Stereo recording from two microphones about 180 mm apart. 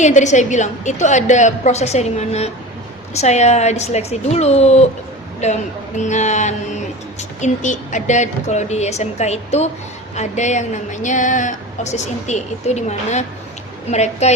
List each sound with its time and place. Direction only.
0.0 s a woman's voice: 40° left (ahead or behind)